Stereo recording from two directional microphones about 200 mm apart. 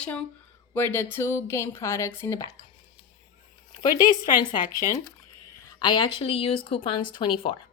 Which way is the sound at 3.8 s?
20° left (ahead or behind).